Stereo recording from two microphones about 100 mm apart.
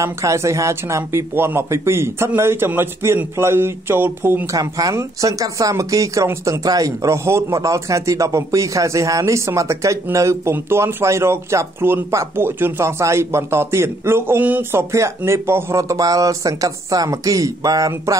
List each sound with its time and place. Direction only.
0.0 s speech: 30° right (ahead or behind)
4.5 s speech: 35° right (ahead or behind)